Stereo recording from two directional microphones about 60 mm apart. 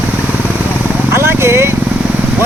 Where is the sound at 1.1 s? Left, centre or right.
Right.